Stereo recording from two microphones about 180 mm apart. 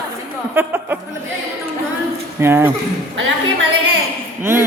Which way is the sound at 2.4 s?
10° right (ahead or behind).